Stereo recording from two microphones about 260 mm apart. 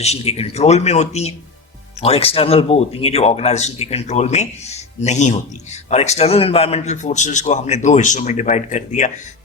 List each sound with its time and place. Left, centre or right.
0.0 s speech: left